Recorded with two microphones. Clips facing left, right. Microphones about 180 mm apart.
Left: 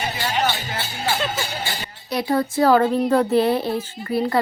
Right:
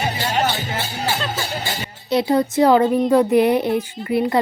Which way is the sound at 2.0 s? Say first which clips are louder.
Right 4 dB; 25° right (ahead or behind).